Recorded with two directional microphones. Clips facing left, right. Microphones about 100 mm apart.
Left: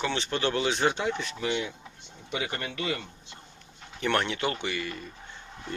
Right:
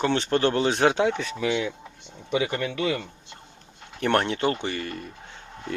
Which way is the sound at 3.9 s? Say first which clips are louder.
Right 4 dB; 45° right (ahead or behind).